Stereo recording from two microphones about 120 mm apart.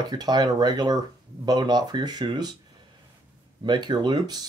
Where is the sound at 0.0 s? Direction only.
35° right (ahead or behind).